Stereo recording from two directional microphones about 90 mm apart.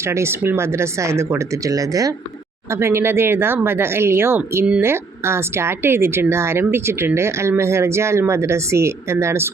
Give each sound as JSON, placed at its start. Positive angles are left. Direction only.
{"t": 0.0, "sound": "speech", "side_deg": -30}
{"t": 2.6, "sound": "a woman's voice", "side_deg": -30}